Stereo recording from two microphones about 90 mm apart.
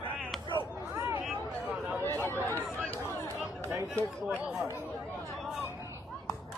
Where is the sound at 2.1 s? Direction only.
25° left (ahead or behind).